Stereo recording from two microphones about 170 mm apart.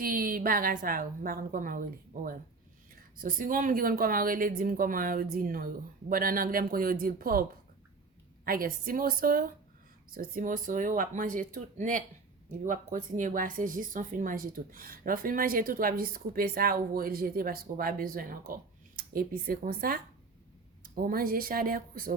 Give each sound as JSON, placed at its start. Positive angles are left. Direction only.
{"t": 0.0, "sound": "speech", "side_deg": -55}
{"t": 8.4, "sound": "speech", "side_deg": -60}